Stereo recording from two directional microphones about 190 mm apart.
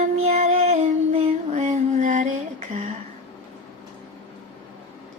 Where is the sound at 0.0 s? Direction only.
35° right (ahead or behind).